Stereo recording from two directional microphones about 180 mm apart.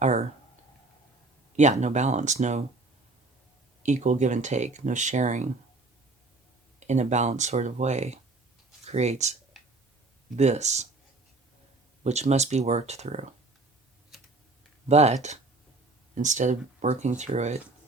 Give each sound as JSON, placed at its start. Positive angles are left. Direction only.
{"t": 0.0, "sound": "a sound", "side_deg": -40}
{"t": 1.5, "sound": "speech", "side_deg": -40}
{"t": 3.8, "sound": "speech", "side_deg": -40}
{"t": 6.7, "sound": "speech", "side_deg": -40}
{"t": 12.0, "sound": "speech", "side_deg": -40}
{"t": 14.8, "sound": "speech", "side_deg": -35}